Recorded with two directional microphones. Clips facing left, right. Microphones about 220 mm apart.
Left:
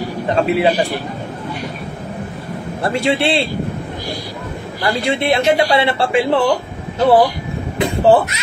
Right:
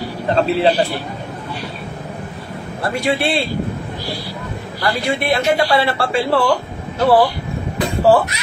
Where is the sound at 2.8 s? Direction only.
25° left (ahead or behind).